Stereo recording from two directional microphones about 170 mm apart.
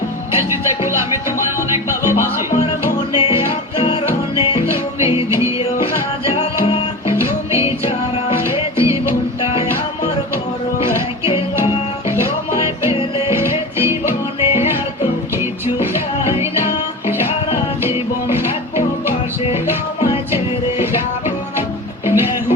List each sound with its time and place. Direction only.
0.3 s music: 15° right (ahead or behind)
7.1 s music: 15° right (ahead or behind)
8.7 s music: 15° right (ahead or behind)
10.9 s music: 15° right (ahead or behind)
12.9 s music: 35° left (ahead or behind)
13.2 s music: 15° right (ahead or behind)
17.8 s music: 15° right (ahead or behind)
22.0 s music: 15° right (ahead or behind)